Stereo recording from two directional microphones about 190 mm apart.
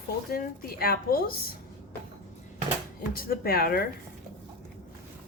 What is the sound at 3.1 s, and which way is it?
Speech, 50° left (ahead or behind).